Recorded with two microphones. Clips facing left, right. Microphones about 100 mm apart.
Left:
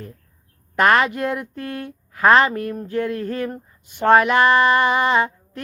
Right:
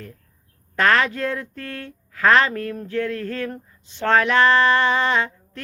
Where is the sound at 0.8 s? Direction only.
20° left (ahead or behind).